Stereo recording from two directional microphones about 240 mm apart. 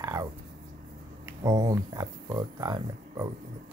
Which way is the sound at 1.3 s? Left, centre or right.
Centre.